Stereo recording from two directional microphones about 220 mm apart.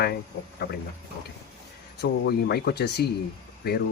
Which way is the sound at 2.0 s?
50° left (ahead or behind).